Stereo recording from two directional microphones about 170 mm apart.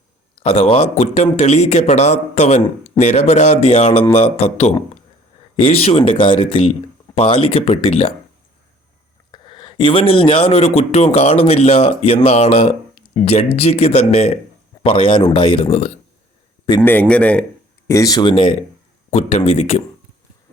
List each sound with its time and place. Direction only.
0.4 s speech: 35° left (ahead or behind)
9.3 s speech: 25° left (ahead or behind)
16.8 s speech: 10° left (ahead or behind)
17.8 s speech: 20° left (ahead or behind); by 19.8 s 40° left (ahead or behind)